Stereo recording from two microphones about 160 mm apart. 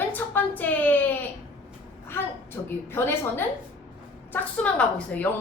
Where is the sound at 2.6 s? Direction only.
15° left (ahead or behind).